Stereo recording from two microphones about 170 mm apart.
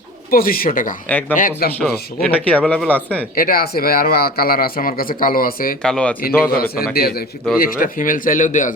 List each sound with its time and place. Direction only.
0.3 s a man's voice: 60° left (ahead or behind)
1.0 s speech: 10° left (ahead or behind)
1.4 s a man's voice: 60° left (ahead or behind)
2.2 s speech: 10° left (ahead or behind)
3.3 s a man's voice: 60° left (ahead or behind)
5.8 s speech: 5° left (ahead or behind)
6.5 s a man's voice: 60° left (ahead or behind)